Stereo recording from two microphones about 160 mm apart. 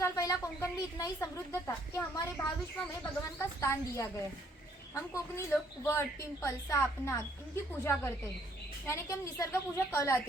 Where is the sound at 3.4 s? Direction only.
20° left (ahead or behind).